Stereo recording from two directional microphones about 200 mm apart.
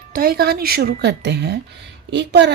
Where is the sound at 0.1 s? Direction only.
50° right (ahead or behind).